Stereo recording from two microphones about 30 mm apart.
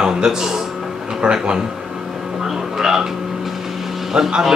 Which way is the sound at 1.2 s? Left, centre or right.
Right.